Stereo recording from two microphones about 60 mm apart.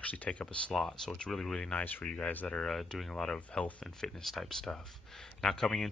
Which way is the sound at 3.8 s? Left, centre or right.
Centre.